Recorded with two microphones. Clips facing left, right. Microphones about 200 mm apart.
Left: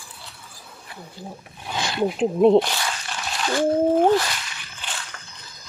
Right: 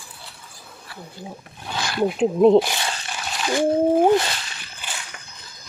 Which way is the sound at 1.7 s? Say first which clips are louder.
Even; 20° left (ahead or behind).